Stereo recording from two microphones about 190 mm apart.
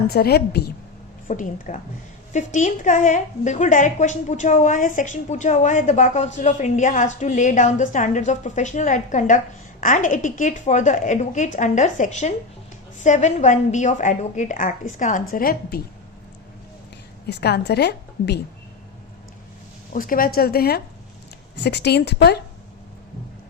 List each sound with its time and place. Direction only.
0.1 s a woman's voice: 55° left (ahead or behind)
1.3 s a woman's voice: 45° left (ahead or behind)
17.2 s a woman's voice: 60° left (ahead or behind)
19.9 s a woman's voice: 45° left (ahead or behind)